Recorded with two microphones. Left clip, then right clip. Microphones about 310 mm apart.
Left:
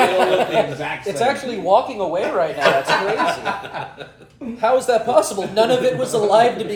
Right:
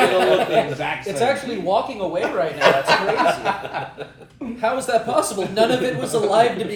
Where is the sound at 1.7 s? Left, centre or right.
Centre.